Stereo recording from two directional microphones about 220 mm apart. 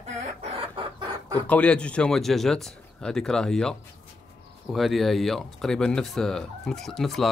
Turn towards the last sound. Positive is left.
turn(degrees=0)  # may be behind; listen again after turning